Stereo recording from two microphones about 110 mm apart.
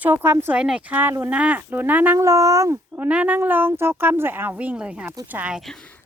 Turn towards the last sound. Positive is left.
turn(degrees=5)  # may be behind; listen again after turning